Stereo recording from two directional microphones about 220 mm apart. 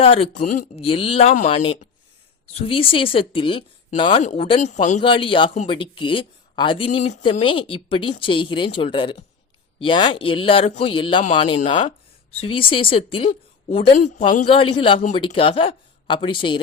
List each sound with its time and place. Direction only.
0.0 s speech: 25° left (ahead or behind)